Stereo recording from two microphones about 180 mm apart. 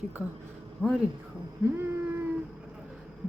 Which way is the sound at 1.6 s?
10° right (ahead or behind).